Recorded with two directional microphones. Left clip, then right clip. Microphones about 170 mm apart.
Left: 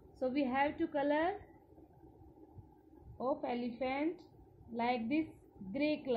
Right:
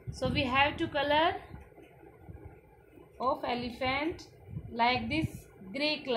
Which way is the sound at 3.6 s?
45° left (ahead or behind).